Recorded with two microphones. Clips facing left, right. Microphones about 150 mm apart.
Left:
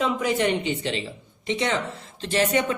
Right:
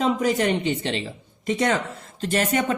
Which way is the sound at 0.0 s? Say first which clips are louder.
Right 2 dB; 40° right (ahead or behind).